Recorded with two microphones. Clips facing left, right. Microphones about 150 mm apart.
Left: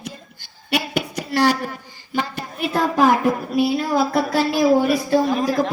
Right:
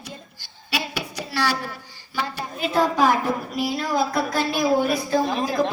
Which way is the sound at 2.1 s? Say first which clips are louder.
Left 3 dB; 55° left (ahead or behind).